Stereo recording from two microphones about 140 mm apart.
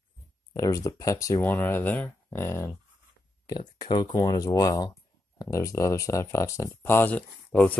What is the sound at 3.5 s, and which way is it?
Speech, 30° left (ahead or behind).